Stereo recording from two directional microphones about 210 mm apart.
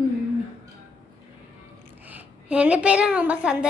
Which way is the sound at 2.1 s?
5° right (ahead or behind).